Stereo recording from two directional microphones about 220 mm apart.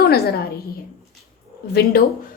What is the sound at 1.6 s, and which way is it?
Speech, 45° left (ahead or behind).